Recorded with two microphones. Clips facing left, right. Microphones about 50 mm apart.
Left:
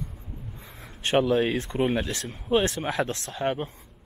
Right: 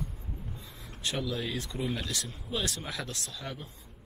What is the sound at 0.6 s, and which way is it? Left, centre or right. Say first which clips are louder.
Speech: left 3 dB; left.